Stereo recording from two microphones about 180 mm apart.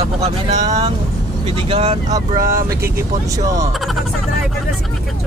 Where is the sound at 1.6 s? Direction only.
35° right (ahead or behind).